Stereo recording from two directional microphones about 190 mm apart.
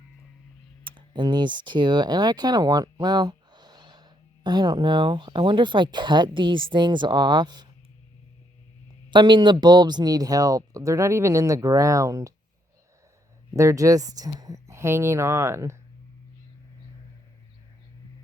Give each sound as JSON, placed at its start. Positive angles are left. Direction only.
{"t": 0.9, "sound": "speech", "side_deg": -25}
{"t": 9.0, "sound": "speech", "side_deg": -25}
{"t": 13.5, "sound": "speech", "side_deg": -15}